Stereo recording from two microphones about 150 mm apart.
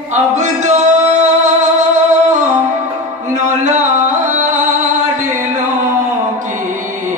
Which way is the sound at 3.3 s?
55° right (ahead or behind).